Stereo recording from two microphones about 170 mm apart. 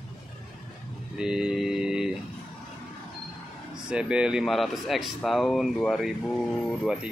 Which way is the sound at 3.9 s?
5° right (ahead or behind).